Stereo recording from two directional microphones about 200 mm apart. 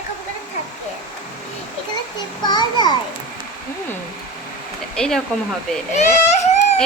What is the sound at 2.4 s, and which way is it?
Speech, 20° left (ahead or behind).